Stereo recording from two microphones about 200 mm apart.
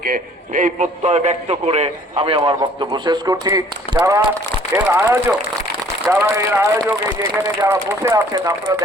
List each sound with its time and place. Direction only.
0.0 s a man's voice: 45° right (ahead or behind); by 8.8 s 15° right (ahead or behind)